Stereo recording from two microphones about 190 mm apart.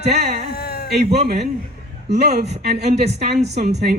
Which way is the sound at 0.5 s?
55° left (ahead or behind).